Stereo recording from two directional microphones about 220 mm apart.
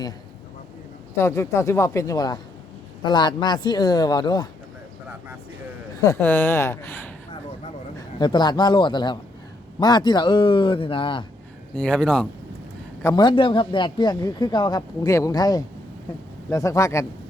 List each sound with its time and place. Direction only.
1.1 s a man's voice: 10° left (ahead or behind)
6.0 s a man's voice: 15° left (ahead or behind)
8.2 s a man's voice: 20° left (ahead or behind)
11.7 s speech: 5° left (ahead or behind)
13.0 s a man's voice: 15° left (ahead or behind)